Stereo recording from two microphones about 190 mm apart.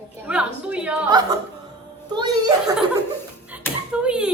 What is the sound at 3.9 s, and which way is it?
Speech, 5° right (ahead or behind).